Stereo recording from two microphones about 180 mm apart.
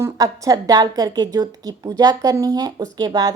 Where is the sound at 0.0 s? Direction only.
20° right (ahead or behind).